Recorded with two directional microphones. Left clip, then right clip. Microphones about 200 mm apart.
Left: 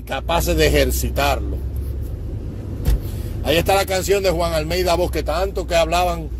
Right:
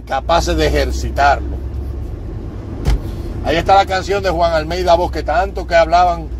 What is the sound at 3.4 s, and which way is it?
Speech, 45° left (ahead or behind).